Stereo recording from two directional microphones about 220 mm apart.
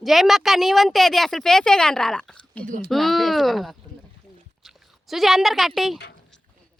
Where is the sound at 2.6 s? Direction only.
35° right (ahead or behind).